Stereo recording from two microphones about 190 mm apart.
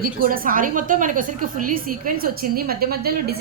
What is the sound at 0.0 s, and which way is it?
A woman's voice, 50° right (ahead or behind).